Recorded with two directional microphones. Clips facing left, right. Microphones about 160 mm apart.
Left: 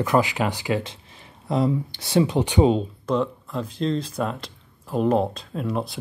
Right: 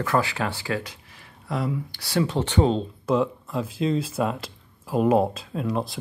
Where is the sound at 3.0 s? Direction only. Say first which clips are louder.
Right 2 dB; 5° right (ahead or behind).